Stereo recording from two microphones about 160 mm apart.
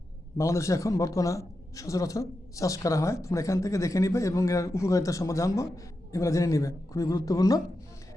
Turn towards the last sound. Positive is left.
turn(degrees=25)  # may be behind; listen again after turning